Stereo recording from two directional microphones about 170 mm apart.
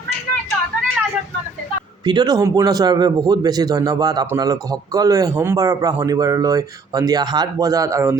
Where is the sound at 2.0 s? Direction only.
25° right (ahead or behind).